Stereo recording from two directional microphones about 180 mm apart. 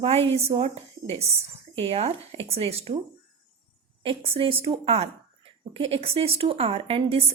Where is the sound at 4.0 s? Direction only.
30° right (ahead or behind).